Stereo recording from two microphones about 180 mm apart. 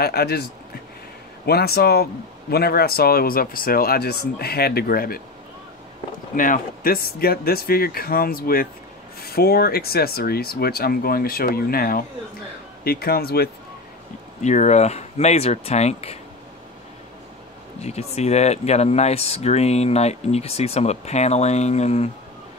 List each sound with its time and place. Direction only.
0.0 s speech: 60° left (ahead or behind)
6.3 s speech: 50° left (ahead or behind)
14.4 s speech: 40° left (ahead or behind)
17.8 s speech: 35° left (ahead or behind)